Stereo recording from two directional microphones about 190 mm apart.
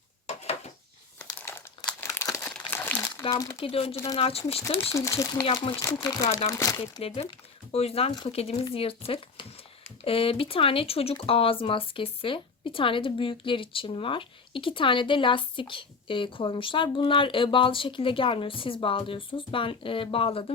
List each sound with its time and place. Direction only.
0.3 s a sound: 35° left (ahead or behind)
1.2 s crumpling: 10° left (ahead or behind)
3.3 s speech: 20° left (ahead or behind)
3.6 s speech: 30° left (ahead or behind)
4.6 s speech: 15° left (ahead or behind)
5.5 s speech: 30° left (ahead or behind)
7.0 s speech: 30° left (ahead or behind)